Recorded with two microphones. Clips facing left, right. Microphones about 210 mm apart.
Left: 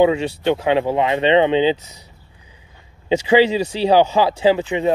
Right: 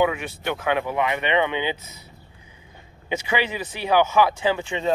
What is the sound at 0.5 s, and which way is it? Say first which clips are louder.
Speech: left 7 dB; 25° left (ahead or behind).